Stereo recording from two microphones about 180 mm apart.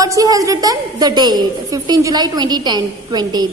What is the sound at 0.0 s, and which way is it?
A woman's voice, 20° right (ahead or behind).